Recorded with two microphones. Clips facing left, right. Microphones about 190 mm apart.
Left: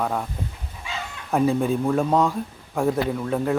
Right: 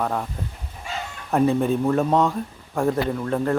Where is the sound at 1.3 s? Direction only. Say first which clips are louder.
Right 1 dB; centre (ahead or behind).